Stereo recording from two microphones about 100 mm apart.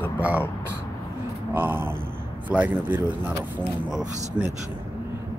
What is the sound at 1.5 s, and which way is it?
Speech, 20° right (ahead or behind).